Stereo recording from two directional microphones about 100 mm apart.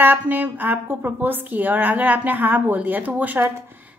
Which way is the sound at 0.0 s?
20° right (ahead or behind).